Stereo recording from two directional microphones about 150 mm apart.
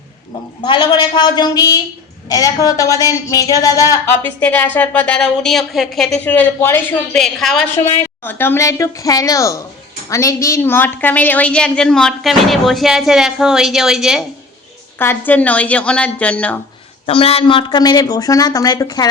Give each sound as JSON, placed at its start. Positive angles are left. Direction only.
{"t": 0.6, "sound": "a woman's voice", "side_deg": 30}
{"t": 7.1, "sound": "a woman's voice", "side_deg": 0}
{"t": 8.2, "sound": "a woman's voice", "side_deg": 15}
{"t": 14.9, "sound": "a woman's voice", "side_deg": 15}
{"t": 17.1, "sound": "speech", "side_deg": 40}